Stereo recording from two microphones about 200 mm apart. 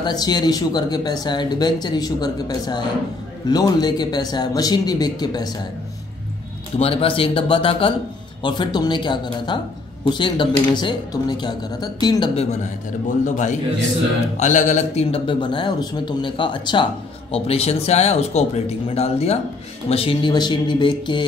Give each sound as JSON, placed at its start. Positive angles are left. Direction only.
{"t": 0.0, "sound": "speech", "side_deg": 20}
{"t": 6.8, "sound": "speech", "side_deg": 30}
{"t": 13.2, "sound": "speech", "side_deg": 40}